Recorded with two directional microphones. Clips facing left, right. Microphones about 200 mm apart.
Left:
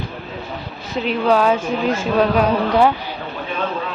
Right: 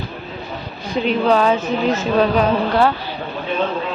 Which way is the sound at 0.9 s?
5° left (ahead or behind).